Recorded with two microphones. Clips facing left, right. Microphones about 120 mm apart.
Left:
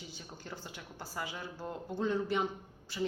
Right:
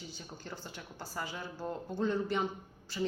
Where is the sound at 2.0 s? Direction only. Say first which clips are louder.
Even; 15° left (ahead or behind).